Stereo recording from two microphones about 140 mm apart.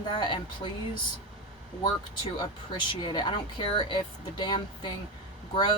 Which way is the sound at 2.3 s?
30° left (ahead or behind).